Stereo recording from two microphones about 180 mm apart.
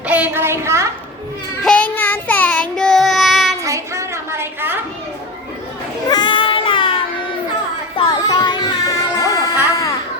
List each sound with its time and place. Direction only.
0.1 s a woman's voice: 10° right (ahead or behind)
1.6 s child singing: 5° left (ahead or behind)
3.6 s a sound: 15° right (ahead or behind)
6.1 s child singing: 25° left (ahead or behind)
7.9 s music: 25° left (ahead or behind)